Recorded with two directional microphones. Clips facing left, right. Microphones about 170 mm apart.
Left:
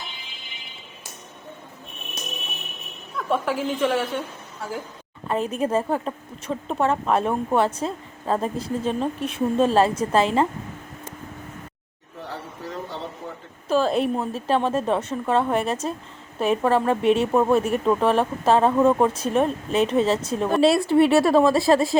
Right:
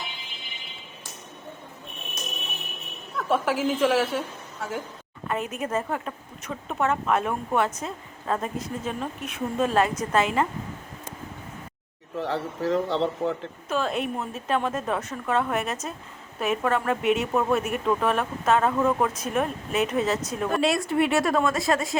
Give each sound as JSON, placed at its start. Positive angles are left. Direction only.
{"t": 3.2, "sound": "a woman's voice", "side_deg": 0}
{"t": 5.3, "sound": "speech", "side_deg": 30}
{"t": 12.2, "sound": "a man's voice", "side_deg": -90}
{"t": 13.7, "sound": "speech", "side_deg": 35}